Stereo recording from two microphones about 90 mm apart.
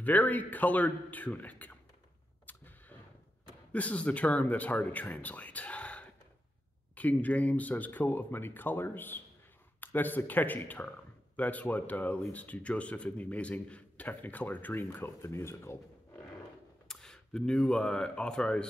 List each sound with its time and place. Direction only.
0.0 s speech: 20° left (ahead or behind)
2.4 s artillery fire: 20° left (ahead or behind)
3.7 s a man's voice: 15° left (ahead or behind)
16.8 s speech: 5° left (ahead or behind)